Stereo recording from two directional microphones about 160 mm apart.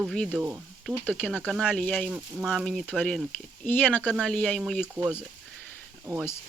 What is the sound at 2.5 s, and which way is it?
Speech, centre (ahead or behind).